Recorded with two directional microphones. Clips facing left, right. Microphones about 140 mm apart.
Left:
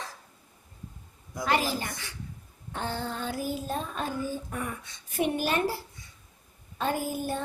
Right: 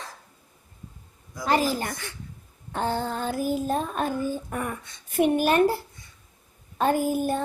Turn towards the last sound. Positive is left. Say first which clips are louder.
# right 7 dB
turn(degrees=-50)  # may be behind; listen again after turning